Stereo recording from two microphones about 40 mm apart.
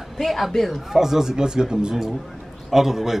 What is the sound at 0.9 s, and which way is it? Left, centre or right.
A man's voice, centre.